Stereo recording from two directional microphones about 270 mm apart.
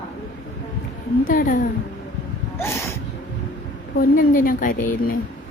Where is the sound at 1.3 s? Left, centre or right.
Left.